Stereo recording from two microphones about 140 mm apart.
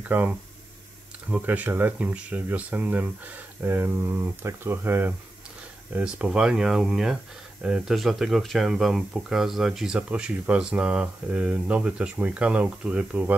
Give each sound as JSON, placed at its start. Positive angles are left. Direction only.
{"t": 0.1, "sound": "speech", "side_deg": -10}
{"t": 1.3, "sound": "speech", "side_deg": -10}